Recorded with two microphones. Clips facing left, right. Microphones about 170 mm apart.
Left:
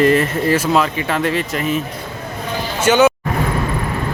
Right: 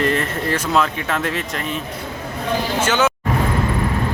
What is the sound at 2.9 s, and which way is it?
Speech, 10° left (ahead or behind).